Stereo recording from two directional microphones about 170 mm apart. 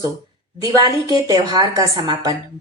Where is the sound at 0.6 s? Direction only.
20° right (ahead or behind).